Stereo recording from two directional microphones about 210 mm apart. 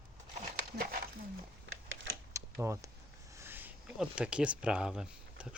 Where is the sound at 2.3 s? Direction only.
15° right (ahead or behind).